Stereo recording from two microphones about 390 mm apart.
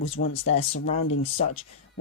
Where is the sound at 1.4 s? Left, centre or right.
Centre.